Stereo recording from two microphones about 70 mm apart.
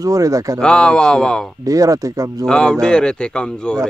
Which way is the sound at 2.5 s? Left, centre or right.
Centre.